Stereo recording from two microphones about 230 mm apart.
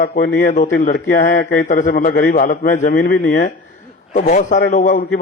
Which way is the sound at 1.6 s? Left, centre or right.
Left.